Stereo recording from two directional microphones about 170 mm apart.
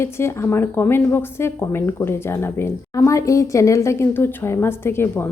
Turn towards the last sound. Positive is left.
turn(degrees=15)  # may be behind; listen again after turning